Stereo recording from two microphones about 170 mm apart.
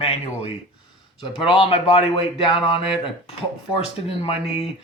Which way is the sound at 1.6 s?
35° left (ahead or behind).